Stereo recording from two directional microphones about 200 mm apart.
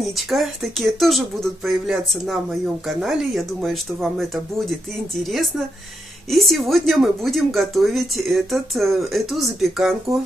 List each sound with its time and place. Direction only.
0.0 s speech: centre (ahead or behind)
5.2 s speech: centre (ahead or behind)